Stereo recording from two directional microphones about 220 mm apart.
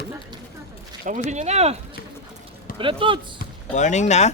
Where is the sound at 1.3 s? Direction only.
30° right (ahead or behind).